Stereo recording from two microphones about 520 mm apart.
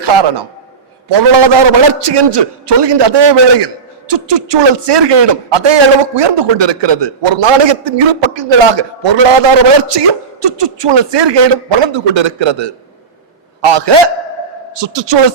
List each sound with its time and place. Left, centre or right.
0.0 s a man's voice: right